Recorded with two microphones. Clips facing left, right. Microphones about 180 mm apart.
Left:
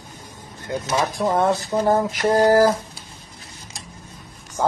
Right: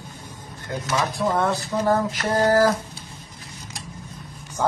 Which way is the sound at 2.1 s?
10° left (ahead or behind).